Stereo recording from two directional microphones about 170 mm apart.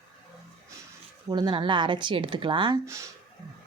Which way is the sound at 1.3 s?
25° right (ahead or behind).